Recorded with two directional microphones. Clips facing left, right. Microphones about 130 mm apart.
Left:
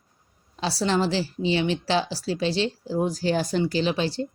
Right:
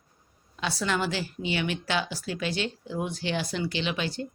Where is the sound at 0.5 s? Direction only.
35° left (ahead or behind).